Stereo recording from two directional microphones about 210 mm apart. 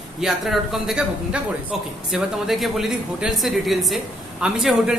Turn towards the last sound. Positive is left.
turn(degrees=-5)  # may be behind; listen again after turning